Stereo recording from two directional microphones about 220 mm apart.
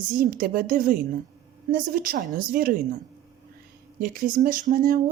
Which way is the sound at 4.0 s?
40° right (ahead or behind).